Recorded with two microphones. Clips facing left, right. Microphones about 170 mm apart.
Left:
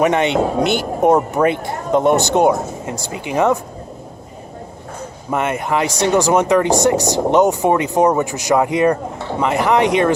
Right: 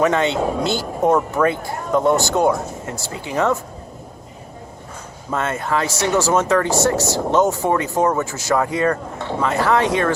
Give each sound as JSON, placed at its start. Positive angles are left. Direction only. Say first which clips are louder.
{"t": 0.0, "sound": "speech", "louder": "left 2 dB", "side_deg": 20}
{"t": 5.3, "sound": "speech", "louder": "left 3 dB", "side_deg": 15}